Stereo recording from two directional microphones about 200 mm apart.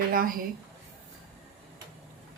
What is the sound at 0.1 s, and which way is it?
Speech, 45° right (ahead or behind).